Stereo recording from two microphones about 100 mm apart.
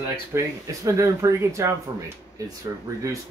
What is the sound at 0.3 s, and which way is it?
Speech, 25° right (ahead or behind).